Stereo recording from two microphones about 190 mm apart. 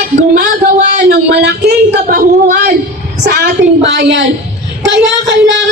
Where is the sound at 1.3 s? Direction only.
60° right (ahead or behind).